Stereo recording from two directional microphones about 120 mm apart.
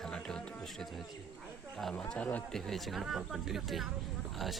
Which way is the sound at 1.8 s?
5° left (ahead or behind).